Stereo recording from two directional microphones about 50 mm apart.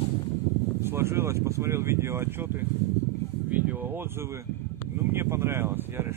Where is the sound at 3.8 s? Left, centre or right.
Right.